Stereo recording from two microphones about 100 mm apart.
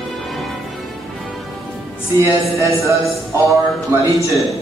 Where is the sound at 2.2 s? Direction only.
30° right (ahead or behind).